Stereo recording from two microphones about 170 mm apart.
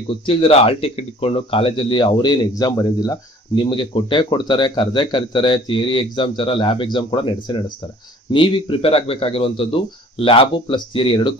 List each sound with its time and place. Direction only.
0.3 s a man's voice: 35° left (ahead or behind)